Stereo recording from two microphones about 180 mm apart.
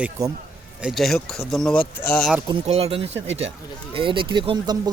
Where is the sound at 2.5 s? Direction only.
35° right (ahead or behind).